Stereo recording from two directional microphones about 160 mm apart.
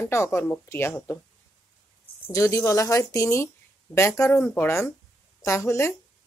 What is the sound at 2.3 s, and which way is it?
Speech, 20° left (ahead or behind).